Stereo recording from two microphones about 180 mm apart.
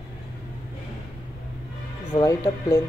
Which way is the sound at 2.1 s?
15° left (ahead or behind).